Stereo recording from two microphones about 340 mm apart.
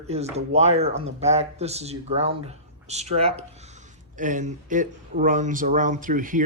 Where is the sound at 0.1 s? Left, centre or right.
Centre.